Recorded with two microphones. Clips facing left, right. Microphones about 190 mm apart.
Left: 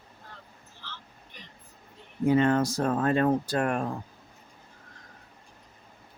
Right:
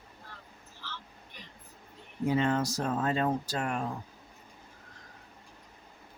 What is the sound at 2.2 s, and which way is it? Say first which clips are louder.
Speech: left 5 dB; 55° left (ahead or behind).